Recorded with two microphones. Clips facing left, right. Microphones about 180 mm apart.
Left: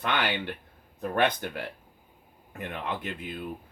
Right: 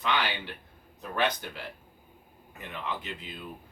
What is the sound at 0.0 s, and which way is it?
Speech, 55° left (ahead or behind).